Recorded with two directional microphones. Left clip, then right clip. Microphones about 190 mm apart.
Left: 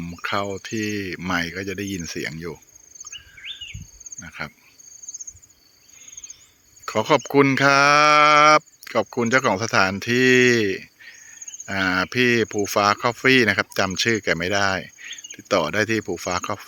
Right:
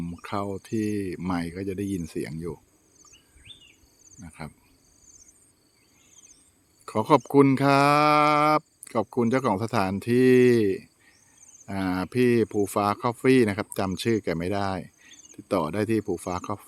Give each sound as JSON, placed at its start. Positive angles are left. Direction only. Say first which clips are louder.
{"t": 0.0, "sound": "speech", "louder": "left 6 dB", "side_deg": 0}
{"t": 3.1, "sound": "chirp", "louder": "left 17 dB", "side_deg": -60}
{"t": 4.2, "sound": "speech", "louder": "left 9 dB", "side_deg": -5}
{"t": 6.8, "sound": "speech", "louder": "left 2 dB", "side_deg": -5}